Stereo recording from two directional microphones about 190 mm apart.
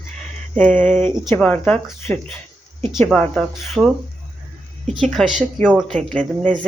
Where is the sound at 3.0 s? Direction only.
Centre (ahead or behind).